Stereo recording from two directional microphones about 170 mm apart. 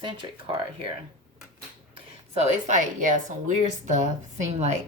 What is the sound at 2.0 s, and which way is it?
A woman's voice, 40° right (ahead or behind).